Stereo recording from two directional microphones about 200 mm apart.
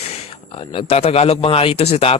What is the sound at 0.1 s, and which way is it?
A man's voice, 30° left (ahead or behind).